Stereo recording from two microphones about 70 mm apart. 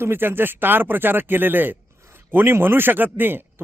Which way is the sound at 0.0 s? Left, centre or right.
Right.